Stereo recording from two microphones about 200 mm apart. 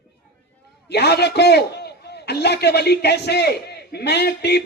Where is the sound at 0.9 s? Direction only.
55° left (ahead or behind).